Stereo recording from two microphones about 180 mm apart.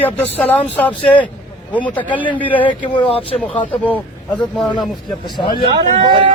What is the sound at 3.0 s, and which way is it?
Speech, 30° left (ahead or behind).